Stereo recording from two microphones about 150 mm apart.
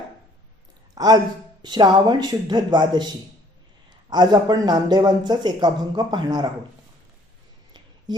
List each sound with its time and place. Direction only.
0.9 s speech: 25° right (ahead or behind)
4.1 s speech: 30° right (ahead or behind)